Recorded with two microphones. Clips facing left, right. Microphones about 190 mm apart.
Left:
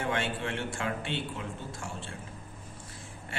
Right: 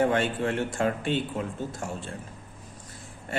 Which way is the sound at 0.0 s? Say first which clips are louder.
Right 8 dB; 40° right (ahead or behind).